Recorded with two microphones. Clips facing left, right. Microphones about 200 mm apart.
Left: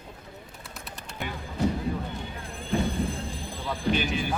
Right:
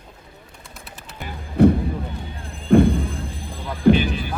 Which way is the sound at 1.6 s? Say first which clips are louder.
Right 13 dB; 60° right (ahead or behind).